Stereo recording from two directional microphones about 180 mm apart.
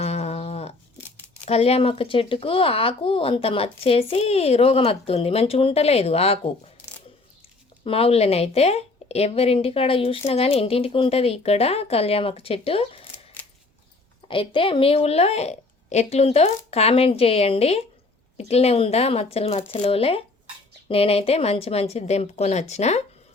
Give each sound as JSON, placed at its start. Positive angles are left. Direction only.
{"t": 0.0, "sound": "a sound", "side_deg": 35}
{"t": 1.5, "sound": "speech", "side_deg": 35}
{"t": 7.9, "sound": "speech", "side_deg": 30}
{"t": 14.3, "sound": "speech", "side_deg": 30}